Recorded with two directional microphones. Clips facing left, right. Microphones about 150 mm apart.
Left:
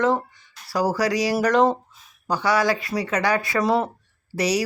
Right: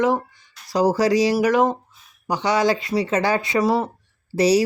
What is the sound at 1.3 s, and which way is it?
Speech, 5° right (ahead or behind).